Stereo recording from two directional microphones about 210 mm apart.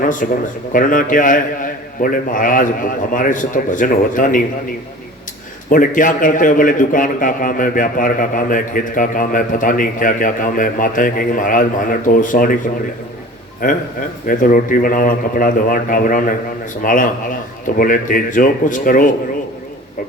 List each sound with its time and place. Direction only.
0.0 s speech: 40° left (ahead or behind)
5.6 s speech: 40° left (ahead or behind)
13.6 s speech: 40° left (ahead or behind)